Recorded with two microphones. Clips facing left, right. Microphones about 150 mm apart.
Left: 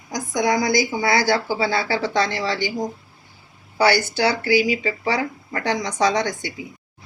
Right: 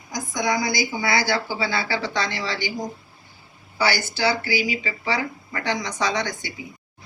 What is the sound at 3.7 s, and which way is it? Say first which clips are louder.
Speech: left 6 dB; 55° left (ahead or behind).